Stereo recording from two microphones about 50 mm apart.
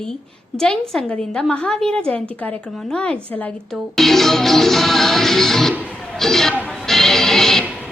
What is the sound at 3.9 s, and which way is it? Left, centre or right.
Music, centre.